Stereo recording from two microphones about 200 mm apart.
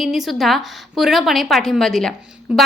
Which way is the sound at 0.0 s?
Centre (ahead or behind).